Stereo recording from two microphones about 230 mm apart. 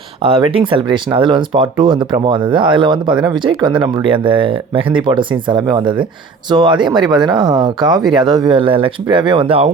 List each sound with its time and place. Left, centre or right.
0.2 s speech: right